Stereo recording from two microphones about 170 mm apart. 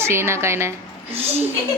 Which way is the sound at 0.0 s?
15° right (ahead or behind).